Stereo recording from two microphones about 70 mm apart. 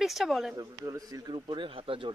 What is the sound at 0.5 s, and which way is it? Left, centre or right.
A man's voice, right.